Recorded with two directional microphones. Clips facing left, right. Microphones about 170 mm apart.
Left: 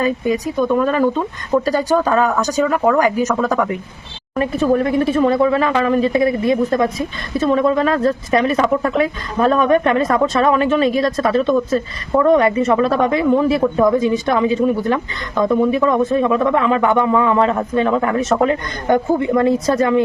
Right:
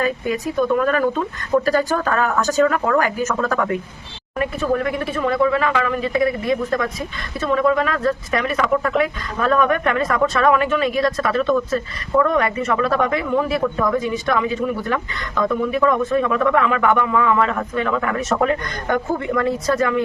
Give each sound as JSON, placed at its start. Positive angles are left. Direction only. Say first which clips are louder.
{"t": 0.0, "sound": "speech", "louder": "left 3 dB", "side_deg": 20}
{"t": 4.4, "sound": "speech", "louder": "left 5 dB", "side_deg": 30}